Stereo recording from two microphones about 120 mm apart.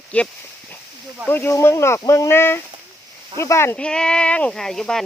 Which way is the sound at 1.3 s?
20° left (ahead or behind).